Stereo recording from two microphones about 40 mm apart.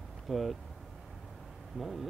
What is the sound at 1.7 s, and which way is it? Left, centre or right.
Speech, centre.